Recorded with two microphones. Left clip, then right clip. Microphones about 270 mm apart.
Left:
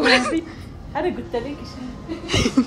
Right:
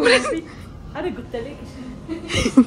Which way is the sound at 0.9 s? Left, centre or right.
Left.